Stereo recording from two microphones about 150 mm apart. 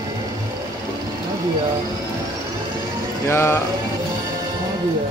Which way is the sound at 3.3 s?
15° left (ahead or behind).